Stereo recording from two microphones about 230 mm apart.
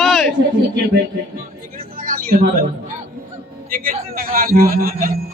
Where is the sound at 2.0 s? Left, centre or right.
Right.